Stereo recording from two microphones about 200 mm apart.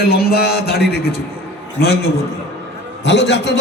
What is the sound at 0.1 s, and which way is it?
A man's voice, 50° left (ahead or behind).